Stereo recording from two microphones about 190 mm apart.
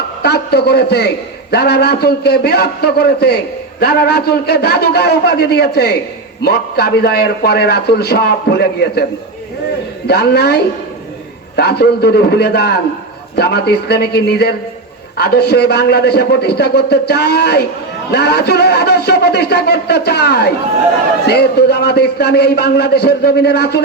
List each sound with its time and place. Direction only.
0.2 s a man's voice: 60° left (ahead or behind)
10.1 s a man's voice: 60° left (ahead or behind)